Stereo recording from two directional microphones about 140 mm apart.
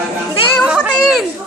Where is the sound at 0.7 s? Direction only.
5° right (ahead or behind).